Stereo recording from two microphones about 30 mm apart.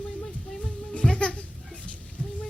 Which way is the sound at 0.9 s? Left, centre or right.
Left.